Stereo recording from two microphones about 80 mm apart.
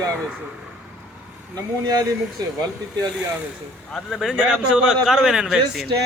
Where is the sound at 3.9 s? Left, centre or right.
Centre.